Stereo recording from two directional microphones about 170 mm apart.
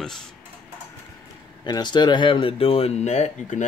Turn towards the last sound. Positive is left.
turn(degrees=45)  # may be behind; listen again after turning